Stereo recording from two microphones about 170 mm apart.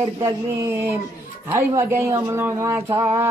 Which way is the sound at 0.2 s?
15° right (ahead or behind).